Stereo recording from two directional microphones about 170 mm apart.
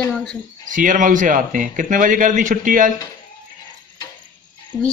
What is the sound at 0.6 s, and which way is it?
A man's voice, 50° right (ahead or behind).